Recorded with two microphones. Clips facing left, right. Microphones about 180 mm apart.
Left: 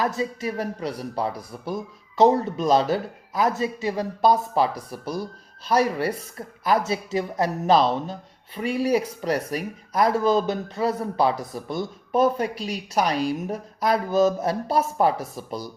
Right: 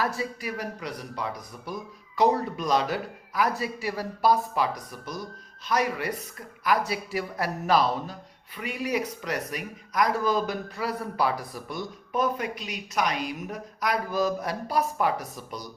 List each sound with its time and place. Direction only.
0.0 s speech: 20° left (ahead or behind)